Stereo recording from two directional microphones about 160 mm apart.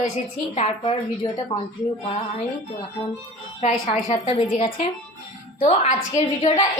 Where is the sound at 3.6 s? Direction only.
45° left (ahead or behind).